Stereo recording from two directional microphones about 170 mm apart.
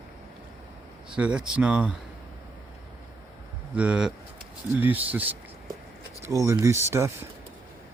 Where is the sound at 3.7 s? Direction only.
5° right (ahead or behind).